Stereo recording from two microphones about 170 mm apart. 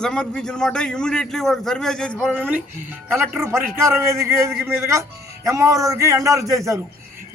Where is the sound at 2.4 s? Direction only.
10° right (ahead or behind).